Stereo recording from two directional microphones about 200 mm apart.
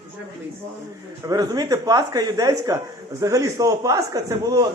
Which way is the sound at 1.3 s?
20° right (ahead or behind).